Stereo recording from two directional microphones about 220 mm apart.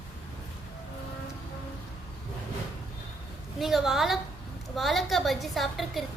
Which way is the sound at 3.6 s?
Centre (ahead or behind).